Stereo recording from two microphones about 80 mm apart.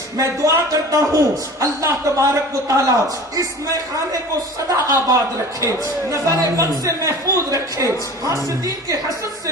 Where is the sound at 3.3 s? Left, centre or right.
Right.